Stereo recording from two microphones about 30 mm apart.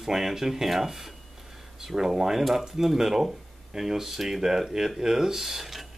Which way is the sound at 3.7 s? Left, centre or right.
Centre.